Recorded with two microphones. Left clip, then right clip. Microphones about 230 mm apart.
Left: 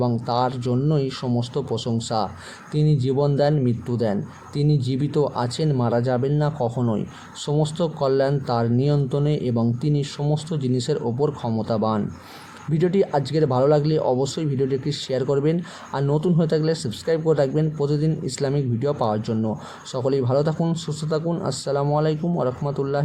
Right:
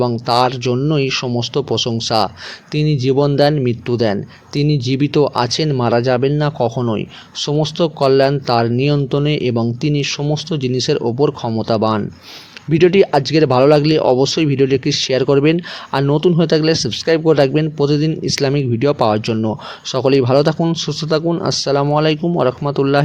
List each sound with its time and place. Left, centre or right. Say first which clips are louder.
0.3 s speech: right 10 dB; right